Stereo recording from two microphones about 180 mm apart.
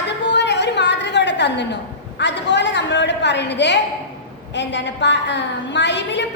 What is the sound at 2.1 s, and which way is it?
A woman's voice, 75° left (ahead or behind).